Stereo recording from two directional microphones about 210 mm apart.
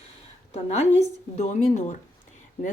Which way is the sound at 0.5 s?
30° left (ahead or behind).